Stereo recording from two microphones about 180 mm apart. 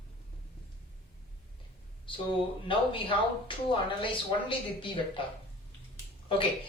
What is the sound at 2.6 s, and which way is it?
Speech, 30° left (ahead or behind).